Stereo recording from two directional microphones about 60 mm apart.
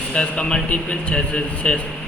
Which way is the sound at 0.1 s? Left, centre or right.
Centre.